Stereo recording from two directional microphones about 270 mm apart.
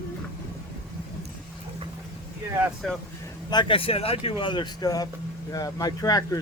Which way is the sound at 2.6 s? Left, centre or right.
Centre.